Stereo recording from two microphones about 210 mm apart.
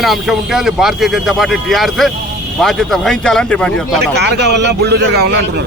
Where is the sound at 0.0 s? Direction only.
Centre (ahead or behind).